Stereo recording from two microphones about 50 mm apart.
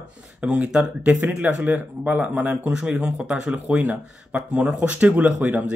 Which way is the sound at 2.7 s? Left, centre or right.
Centre.